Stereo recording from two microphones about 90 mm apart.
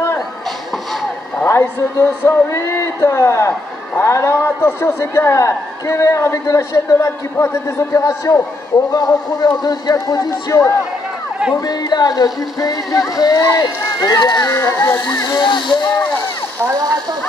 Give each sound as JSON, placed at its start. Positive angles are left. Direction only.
{"t": 1.4, "sound": "a man's voice", "side_deg": 30}
{"t": 8.9, "sound": "speech", "side_deg": 45}
{"t": 13.8, "sound": "run", "side_deg": 40}
{"t": 14.2, "sound": "speech", "side_deg": 55}
{"t": 14.5, "sound": "a man's voice", "side_deg": 35}
{"t": 15.4, "sound": "speech", "side_deg": 55}